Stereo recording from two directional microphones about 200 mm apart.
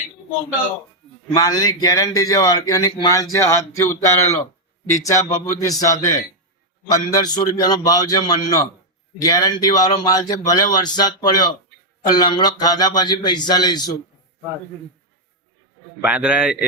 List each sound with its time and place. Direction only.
1.3 s a man's voice: 20° left (ahead or behind)
16.0 s a man's voice: 5° right (ahead or behind)